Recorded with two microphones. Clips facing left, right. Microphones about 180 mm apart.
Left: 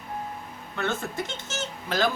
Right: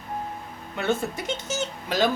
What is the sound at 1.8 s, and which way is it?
Speech, 20° right (ahead or behind).